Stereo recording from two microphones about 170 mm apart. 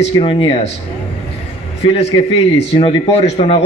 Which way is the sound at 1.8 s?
35° left (ahead or behind).